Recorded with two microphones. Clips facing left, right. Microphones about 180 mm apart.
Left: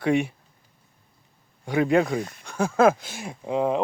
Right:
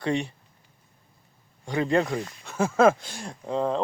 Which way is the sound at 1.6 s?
5° left (ahead or behind).